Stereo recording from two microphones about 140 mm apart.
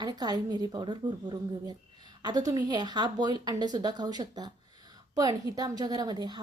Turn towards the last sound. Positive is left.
turn(degrees=-30)  # may be behind; listen again after turning